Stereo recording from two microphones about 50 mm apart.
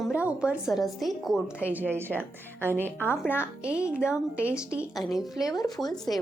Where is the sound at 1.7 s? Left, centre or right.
Right.